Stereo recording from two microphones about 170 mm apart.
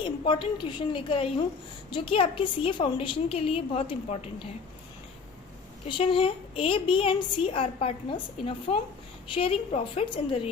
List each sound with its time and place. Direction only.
0.0 s a woman's voice: 30° left (ahead or behind)
5.9 s a woman's voice: 30° left (ahead or behind)